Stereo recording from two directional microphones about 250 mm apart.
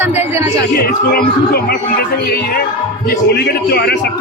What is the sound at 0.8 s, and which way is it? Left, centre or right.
Music, left.